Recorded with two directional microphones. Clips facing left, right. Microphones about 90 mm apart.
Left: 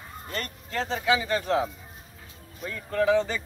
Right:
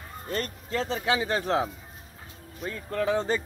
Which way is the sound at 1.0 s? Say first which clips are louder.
Left 4 dB; 50° right (ahead or behind).